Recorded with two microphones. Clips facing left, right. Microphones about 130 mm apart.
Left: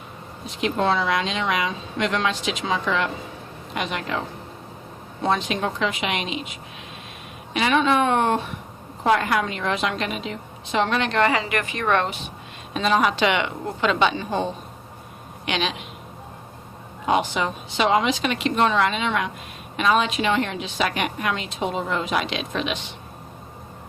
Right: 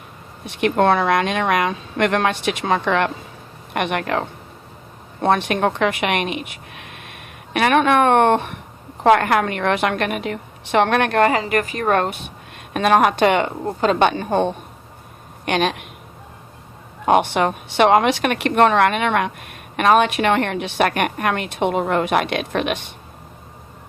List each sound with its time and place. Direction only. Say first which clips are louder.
0.6 s a woman's voice: right 5 dB; 60° right (ahead or behind)
12.7 s a woman's voice: right 5 dB; 60° right (ahead or behind)
17.1 s a woman's voice: right 6 dB; 60° right (ahead or behind)